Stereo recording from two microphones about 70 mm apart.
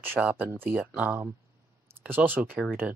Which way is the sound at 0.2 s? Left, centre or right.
Right.